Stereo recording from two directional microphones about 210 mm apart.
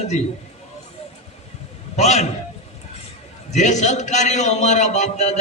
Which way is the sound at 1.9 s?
30° left (ahead or behind).